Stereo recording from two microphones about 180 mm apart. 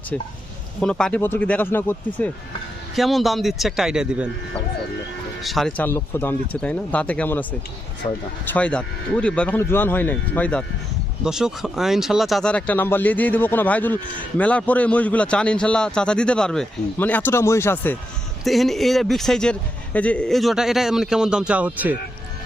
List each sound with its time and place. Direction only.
0.8 s a man's voice: 5° left (ahead or behind)
5.4 s a man's voice: centre (ahead or behind)
8.0 s speech: 25° left (ahead or behind)
8.5 s a man's voice: 5° left (ahead or behind)
18.4 s a man's voice: centre (ahead or behind)